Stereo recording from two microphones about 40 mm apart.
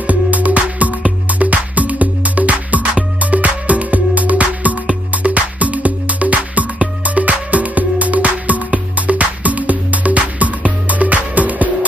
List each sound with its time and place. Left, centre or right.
0.0 s music: right